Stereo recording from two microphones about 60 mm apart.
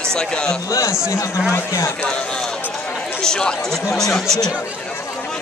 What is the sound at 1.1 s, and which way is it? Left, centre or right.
Speech, left.